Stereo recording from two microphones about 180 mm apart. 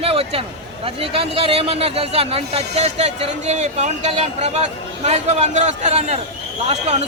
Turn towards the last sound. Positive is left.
turn(degrees=-35)  # may be behind; listen again after turning